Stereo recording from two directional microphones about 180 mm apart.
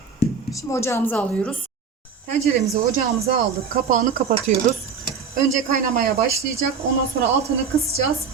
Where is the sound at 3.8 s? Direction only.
40° right (ahead or behind).